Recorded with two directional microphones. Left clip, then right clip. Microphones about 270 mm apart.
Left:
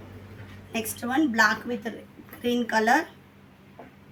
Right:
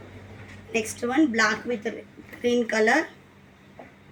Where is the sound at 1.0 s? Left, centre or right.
Centre.